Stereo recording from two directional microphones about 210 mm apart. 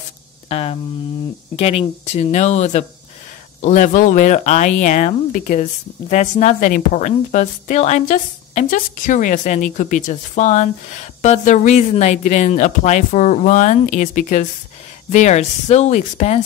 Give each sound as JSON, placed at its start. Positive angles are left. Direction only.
{"t": 0.5, "sound": "hum", "side_deg": 30}
{"t": 1.6, "sound": "speech", "side_deg": 30}